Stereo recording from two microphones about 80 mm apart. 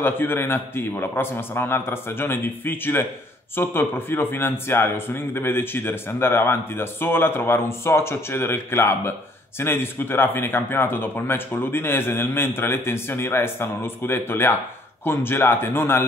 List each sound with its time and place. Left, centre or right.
0.0 s a man's voice: left